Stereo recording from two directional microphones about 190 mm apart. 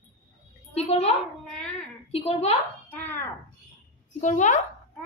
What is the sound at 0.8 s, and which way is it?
Speech, 35° left (ahead or behind).